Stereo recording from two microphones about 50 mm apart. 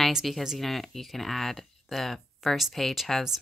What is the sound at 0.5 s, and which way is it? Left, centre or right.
Speech, centre.